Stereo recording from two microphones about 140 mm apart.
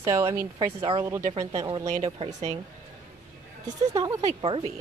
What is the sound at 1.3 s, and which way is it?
Speech, 30° right (ahead or behind).